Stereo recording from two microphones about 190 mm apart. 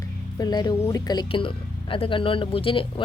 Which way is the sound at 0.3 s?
20° left (ahead or behind).